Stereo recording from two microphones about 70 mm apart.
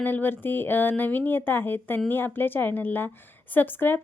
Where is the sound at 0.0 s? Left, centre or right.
Left.